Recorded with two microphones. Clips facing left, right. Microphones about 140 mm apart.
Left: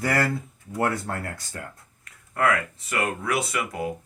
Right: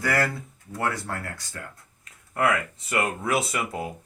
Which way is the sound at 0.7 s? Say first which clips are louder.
Left 3 dB; 30° left (ahead or behind).